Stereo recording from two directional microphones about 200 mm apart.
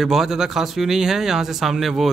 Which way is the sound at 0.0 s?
Centre (ahead or behind).